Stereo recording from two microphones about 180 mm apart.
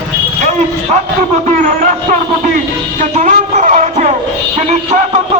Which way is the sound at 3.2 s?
45° right (ahead or behind).